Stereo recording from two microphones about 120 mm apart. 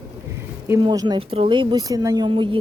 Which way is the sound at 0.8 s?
35° right (ahead or behind).